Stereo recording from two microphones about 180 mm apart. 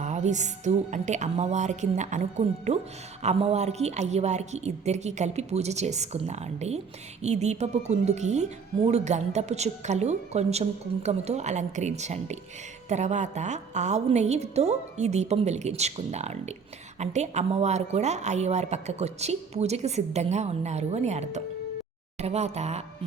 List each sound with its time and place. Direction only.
0.0 s speech: 40° right (ahead or behind)